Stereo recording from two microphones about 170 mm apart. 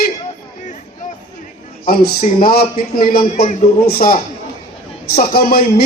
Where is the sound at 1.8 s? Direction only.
60° left (ahead or behind).